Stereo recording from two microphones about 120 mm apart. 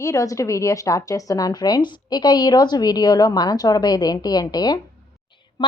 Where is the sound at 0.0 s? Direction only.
25° left (ahead or behind).